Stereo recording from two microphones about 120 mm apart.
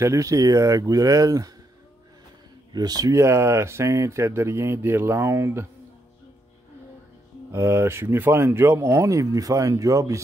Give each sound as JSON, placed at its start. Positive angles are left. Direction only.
{"t": 0.0, "sound": "speech", "side_deg": -25}
{"t": 2.7, "sound": "speech", "side_deg": -35}
{"t": 7.5, "sound": "speech", "side_deg": -20}